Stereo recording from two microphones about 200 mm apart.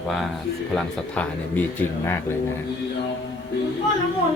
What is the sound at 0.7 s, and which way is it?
Speech, 5° left (ahead or behind).